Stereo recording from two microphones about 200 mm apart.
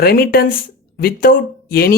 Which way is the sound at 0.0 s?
50° left (ahead or behind).